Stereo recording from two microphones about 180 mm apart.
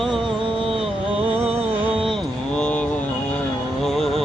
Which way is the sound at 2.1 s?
5° left (ahead or behind).